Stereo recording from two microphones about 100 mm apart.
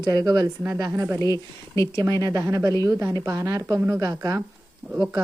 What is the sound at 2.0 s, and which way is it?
A woman's voice, 45° right (ahead or behind).